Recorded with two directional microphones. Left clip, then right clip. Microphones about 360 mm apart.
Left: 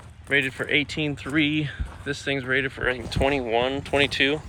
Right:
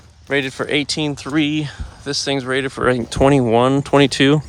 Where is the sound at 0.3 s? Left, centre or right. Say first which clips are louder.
Right 3 dB; centre.